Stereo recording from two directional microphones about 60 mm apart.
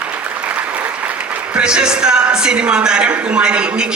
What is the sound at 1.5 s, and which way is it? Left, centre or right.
A man's voice, centre.